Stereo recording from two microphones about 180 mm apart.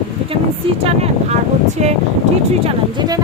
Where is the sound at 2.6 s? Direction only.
20° right (ahead or behind).